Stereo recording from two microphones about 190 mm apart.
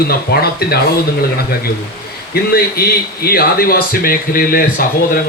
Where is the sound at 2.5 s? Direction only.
55° left (ahead or behind).